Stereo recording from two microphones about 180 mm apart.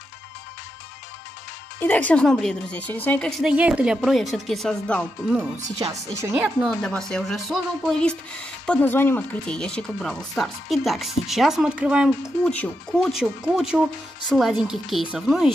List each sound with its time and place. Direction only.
1.8 s a woman's voice: 10° left (ahead or behind)
6.1 s a woman's voice: 15° right (ahead or behind)
6.4 s speech: centre (ahead or behind)